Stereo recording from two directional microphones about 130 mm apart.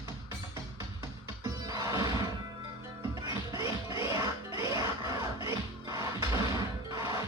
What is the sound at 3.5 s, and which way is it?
Music, 25° right (ahead or behind).